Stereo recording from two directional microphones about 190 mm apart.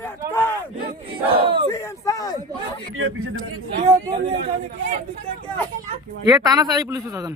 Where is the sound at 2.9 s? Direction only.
90° right.